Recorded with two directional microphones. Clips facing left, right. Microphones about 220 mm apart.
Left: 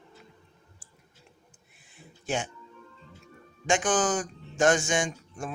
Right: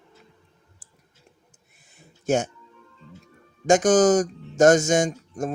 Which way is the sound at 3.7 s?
40° right (ahead or behind).